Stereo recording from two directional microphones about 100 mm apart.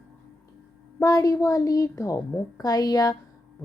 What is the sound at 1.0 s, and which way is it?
Speech, 35° left (ahead or behind).